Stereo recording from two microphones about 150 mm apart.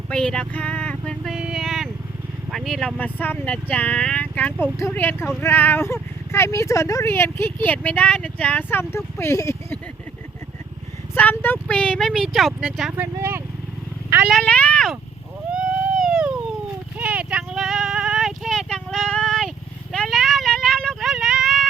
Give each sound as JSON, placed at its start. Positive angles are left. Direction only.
{"t": 0.1, "sound": "vehicle", "side_deg": 5}
{"t": 2.5, "sound": "speech", "side_deg": 0}
{"t": 11.1, "sound": "speech", "side_deg": 10}
{"t": 12.9, "sound": "speech", "side_deg": -15}
{"t": 14.3, "sound": "speech", "side_deg": 5}
{"t": 15.5, "sound": "a sound", "side_deg": -5}
{"t": 19.9, "sound": "vehicle", "side_deg": 0}